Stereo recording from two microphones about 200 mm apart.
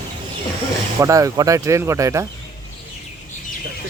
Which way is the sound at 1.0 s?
15° right (ahead or behind).